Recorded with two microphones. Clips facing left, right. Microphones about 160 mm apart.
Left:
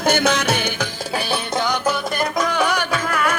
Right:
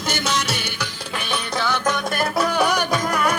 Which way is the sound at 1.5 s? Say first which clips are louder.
Left 1 dB; 15° left (ahead or behind).